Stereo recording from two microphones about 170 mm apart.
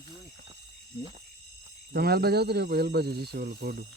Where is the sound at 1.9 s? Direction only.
65° right (ahead or behind).